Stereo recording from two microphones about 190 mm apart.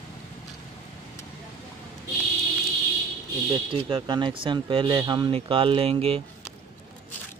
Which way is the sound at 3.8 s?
25° right (ahead or behind).